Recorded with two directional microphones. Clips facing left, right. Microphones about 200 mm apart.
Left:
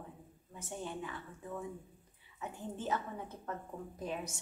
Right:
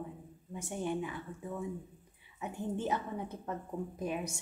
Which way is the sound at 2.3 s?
15° right (ahead or behind).